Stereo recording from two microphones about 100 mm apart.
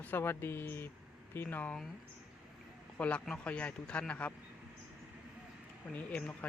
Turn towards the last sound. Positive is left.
turn(degrees=10)  # may be behind; listen again after turning